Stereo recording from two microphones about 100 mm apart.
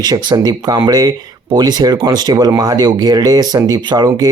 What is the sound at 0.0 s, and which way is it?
Speech, 45° right (ahead or behind).